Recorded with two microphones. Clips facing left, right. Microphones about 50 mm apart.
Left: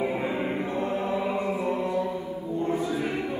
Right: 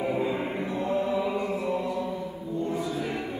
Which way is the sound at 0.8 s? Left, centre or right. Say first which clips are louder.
Right 3 dB; left.